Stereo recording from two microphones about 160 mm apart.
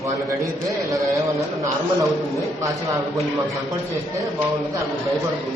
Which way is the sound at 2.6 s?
20° right (ahead or behind).